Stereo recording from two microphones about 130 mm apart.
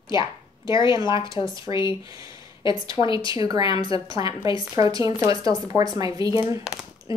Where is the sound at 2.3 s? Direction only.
40° left (ahead or behind).